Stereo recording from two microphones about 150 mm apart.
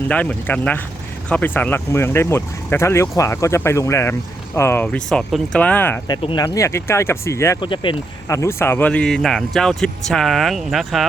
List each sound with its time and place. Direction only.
0.1 s speech: 10° left (ahead or behind)
6.1 s speech: 30° left (ahead or behind)
7.6 s speech: 35° left (ahead or behind)
8.3 s speech: 20° left (ahead or behind); by 11.0 s centre (ahead or behind)